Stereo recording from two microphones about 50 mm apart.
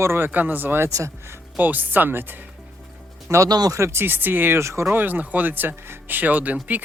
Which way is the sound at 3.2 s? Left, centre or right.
Right.